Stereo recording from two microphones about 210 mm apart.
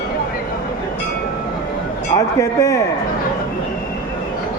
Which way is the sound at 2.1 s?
15° left (ahead or behind).